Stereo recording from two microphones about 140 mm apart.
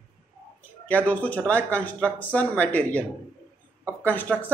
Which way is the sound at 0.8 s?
10° left (ahead or behind).